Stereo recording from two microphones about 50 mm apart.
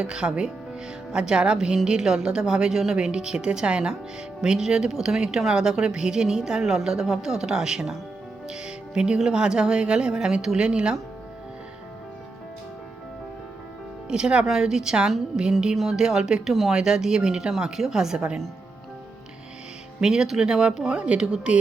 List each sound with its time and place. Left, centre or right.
0.0 s speech: centre
14.1 s speech: centre
20.0 s speech: centre